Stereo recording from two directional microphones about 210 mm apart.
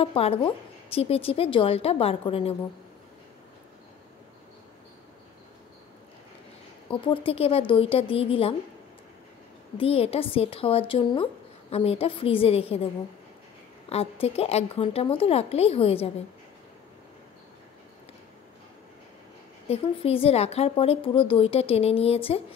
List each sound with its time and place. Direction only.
0.0 s speech: 25° left (ahead or behind)
6.9 s speech: 25° left (ahead or behind)
9.8 s speech: 30° left (ahead or behind)
13.8 s speech: 30° left (ahead or behind)
19.7 s speech: 25° left (ahead or behind)